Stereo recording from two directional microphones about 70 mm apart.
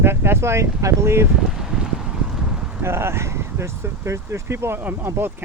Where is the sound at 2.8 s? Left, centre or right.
Right.